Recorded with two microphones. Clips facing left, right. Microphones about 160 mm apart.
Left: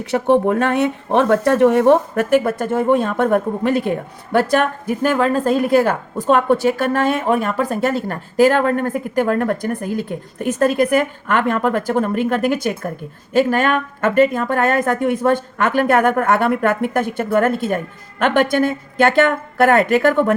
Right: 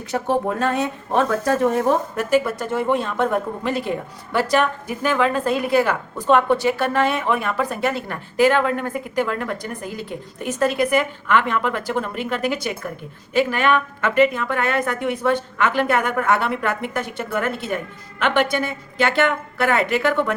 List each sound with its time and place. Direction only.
0.0 s speech: 65° left (ahead or behind); by 20.3 s 50° left (ahead or behind)